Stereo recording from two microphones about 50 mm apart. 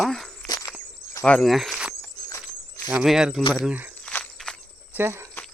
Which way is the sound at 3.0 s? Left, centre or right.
Centre.